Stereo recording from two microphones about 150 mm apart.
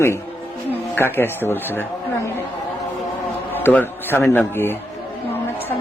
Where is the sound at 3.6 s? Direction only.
10° left (ahead or behind).